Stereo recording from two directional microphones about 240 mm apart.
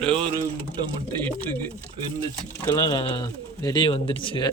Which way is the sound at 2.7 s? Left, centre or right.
Centre.